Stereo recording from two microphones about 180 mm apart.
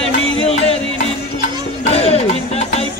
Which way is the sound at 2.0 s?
35° left (ahead or behind).